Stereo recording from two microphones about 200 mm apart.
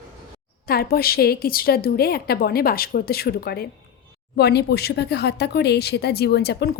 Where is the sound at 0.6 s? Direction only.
50° left (ahead or behind).